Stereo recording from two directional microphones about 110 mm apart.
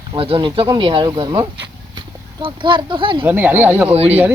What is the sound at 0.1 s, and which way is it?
Speech, 50° right (ahead or behind).